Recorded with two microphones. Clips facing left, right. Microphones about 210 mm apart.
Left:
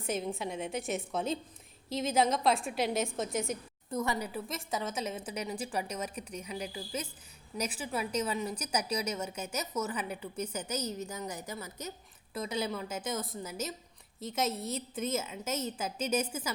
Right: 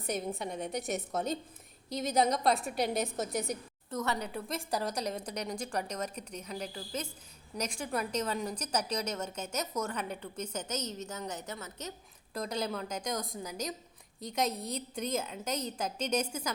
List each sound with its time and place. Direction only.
0.0 s a woman's voice: centre (ahead or behind)
3.8 s a woman's voice: 10° left (ahead or behind)